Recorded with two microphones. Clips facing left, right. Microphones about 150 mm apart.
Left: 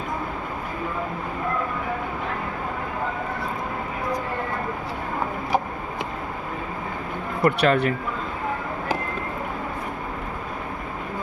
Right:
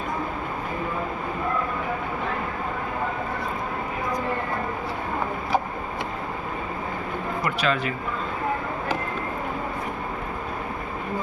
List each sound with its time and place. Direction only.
7.4 s speech: 60° left (ahead or behind)